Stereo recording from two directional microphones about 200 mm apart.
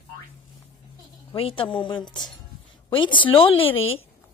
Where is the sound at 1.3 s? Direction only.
25° left (ahead or behind).